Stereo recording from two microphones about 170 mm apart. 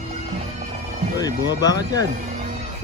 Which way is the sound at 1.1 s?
20° left (ahead or behind).